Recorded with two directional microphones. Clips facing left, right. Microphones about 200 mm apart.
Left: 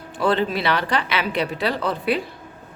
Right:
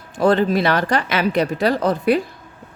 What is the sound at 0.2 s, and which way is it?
Speech, 45° right (ahead or behind).